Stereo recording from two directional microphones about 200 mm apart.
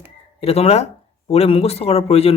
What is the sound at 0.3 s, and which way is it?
Speech, 30° left (ahead or behind).